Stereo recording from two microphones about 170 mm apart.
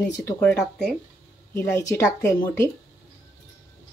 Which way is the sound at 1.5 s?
15° left (ahead or behind).